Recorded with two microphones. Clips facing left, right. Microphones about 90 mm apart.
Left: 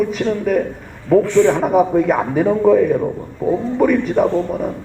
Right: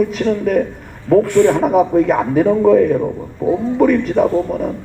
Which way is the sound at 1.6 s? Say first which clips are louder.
Right 1 dB; centre (ahead or behind).